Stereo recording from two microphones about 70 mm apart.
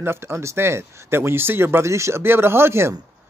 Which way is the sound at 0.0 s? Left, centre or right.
Right.